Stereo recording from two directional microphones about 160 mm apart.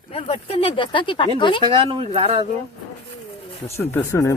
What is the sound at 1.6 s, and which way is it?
Speech, 30° right (ahead or behind).